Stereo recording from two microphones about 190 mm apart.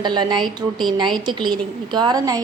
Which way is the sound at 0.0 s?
25° right (ahead or behind).